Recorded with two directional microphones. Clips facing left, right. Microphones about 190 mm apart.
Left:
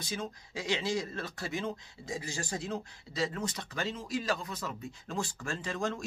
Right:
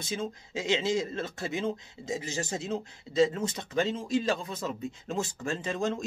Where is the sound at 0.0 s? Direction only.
25° right (ahead or behind).